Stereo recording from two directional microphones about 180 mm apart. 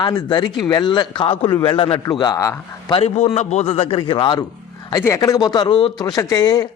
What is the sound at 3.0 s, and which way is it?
A man's voice, 35° left (ahead or behind).